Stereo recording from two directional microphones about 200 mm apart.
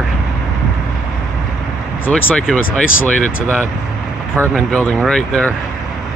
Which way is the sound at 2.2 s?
5° left (ahead or behind).